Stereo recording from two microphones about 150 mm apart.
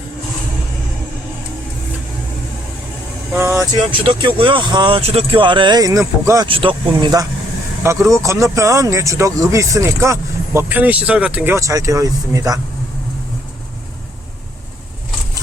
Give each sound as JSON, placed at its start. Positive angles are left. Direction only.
{"t": 3.3, "sound": "vehicle", "side_deg": -20}
{"t": 4.0, "sound": "speech", "side_deg": -35}
{"t": 6.5, "sound": "speech", "side_deg": -35}